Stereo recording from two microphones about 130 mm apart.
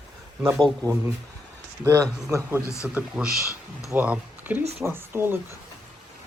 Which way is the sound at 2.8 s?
10° right (ahead or behind).